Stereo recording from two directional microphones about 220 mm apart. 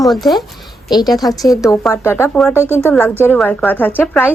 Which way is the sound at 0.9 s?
20° left (ahead or behind).